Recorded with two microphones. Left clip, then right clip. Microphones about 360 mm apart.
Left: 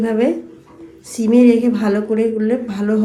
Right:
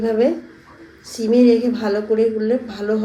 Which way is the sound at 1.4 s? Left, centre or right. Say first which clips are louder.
Left 2 dB; centre.